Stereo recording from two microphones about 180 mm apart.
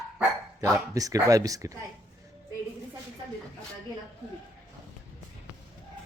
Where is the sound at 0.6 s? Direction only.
20° right (ahead or behind).